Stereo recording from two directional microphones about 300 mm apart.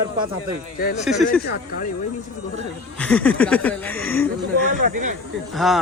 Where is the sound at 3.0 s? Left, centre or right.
Centre.